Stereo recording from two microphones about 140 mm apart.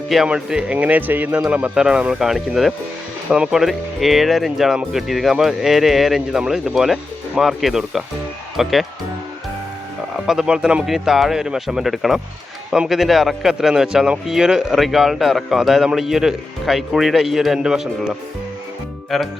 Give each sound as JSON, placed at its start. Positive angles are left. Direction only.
{"t": 0.1, "sound": "speech", "side_deg": -5}
{"t": 10.2, "sound": "speech", "side_deg": -5}